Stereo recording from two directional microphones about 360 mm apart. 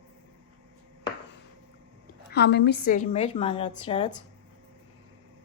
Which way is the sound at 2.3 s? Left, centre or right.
Left.